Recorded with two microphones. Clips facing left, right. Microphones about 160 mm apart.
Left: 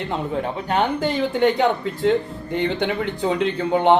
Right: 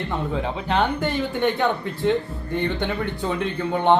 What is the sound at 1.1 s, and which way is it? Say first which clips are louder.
Speech: left 4 dB; 90° left.